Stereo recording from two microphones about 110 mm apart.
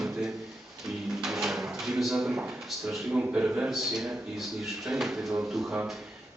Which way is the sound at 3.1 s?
15° right (ahead or behind).